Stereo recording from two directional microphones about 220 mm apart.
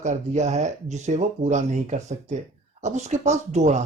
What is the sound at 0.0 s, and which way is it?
Speech, 30° right (ahead or behind).